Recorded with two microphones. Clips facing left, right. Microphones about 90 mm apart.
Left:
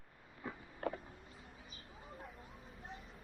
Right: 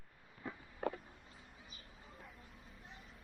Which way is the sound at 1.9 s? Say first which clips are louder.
Left 8 dB; 35° left (ahead or behind).